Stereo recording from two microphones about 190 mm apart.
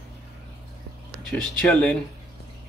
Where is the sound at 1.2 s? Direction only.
5° left (ahead or behind).